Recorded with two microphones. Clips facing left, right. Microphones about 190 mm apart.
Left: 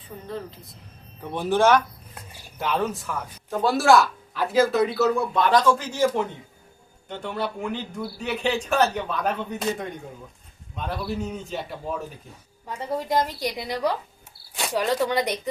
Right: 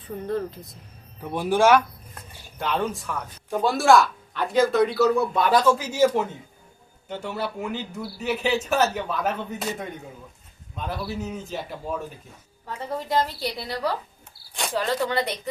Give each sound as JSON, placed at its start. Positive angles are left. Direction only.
{"t": 1.2, "sound": "speech", "side_deg": -10}
{"t": 2.6, "sound": "speech", "side_deg": 0}
{"t": 12.6, "sound": "a woman's voice", "side_deg": 10}